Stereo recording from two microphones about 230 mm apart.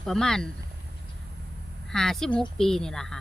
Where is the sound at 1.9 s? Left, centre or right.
Centre.